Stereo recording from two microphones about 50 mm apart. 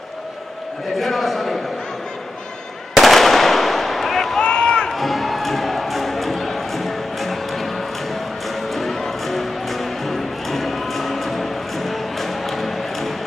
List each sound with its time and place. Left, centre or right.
0.9 s a sound: centre
2.9 s firecracker: centre
4.4 s run: centre
4.9 s music: centre